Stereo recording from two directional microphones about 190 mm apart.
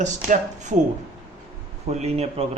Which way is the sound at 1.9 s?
35° right (ahead or behind).